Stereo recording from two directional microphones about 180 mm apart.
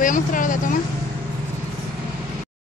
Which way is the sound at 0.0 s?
45° left (ahead or behind).